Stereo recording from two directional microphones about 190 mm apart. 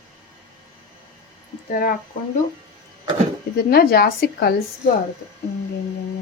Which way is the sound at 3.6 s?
55° left (ahead or behind).